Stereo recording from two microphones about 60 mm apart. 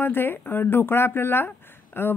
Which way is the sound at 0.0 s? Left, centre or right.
Left.